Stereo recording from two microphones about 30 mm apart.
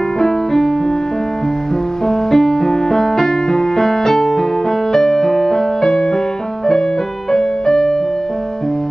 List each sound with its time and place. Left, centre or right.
0.2 s music: centre
2.0 s music: centre
7.3 s music: centre